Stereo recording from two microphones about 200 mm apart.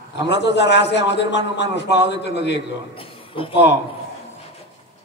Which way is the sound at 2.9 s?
25° left (ahead or behind).